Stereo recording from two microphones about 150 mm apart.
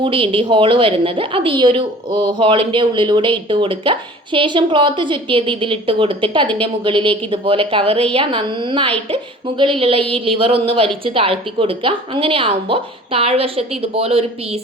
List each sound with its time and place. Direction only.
0.0 s a woman's voice: 35° right (ahead or behind)